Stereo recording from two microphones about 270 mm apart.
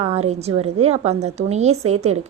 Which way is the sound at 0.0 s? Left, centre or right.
Right.